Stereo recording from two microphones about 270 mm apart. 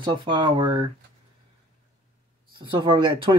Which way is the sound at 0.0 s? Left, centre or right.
Centre.